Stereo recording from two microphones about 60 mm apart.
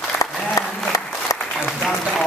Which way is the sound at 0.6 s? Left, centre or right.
Left.